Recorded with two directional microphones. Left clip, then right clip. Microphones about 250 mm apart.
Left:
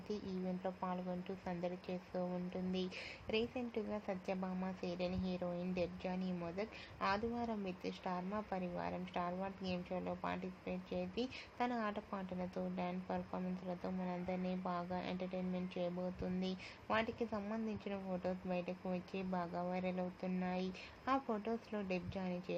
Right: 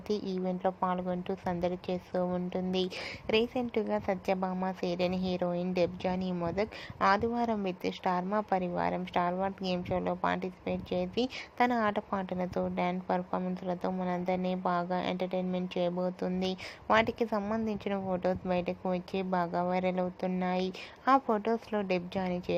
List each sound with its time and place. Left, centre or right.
0.1 s a woman's voice: right